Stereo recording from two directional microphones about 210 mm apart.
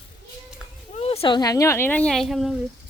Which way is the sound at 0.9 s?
30° left (ahead or behind).